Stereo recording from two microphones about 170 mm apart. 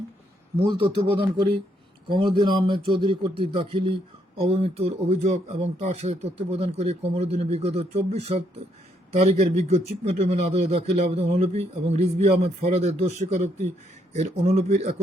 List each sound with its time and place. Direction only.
0.6 s speech: 30° right (ahead or behind)